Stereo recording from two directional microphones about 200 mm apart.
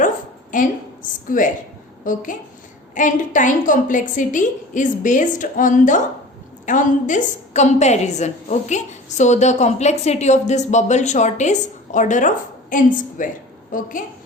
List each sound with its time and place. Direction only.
0.5 s a woman's voice: 40° left (ahead or behind)